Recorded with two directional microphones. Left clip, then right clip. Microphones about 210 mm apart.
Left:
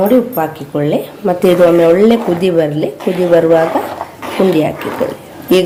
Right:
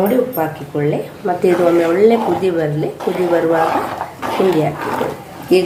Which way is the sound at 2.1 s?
30° left (ahead or behind).